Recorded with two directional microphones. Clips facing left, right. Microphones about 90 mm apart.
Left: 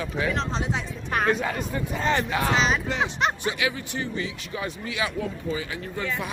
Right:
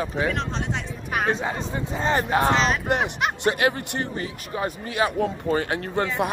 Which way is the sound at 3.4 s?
55° right (ahead or behind).